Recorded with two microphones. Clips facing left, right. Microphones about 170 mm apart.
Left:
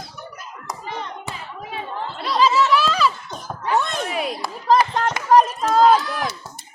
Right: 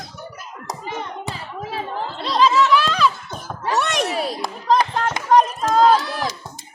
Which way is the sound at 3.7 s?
80° right.